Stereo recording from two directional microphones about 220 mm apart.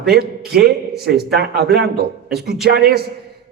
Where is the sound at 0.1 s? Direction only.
45° right (ahead or behind).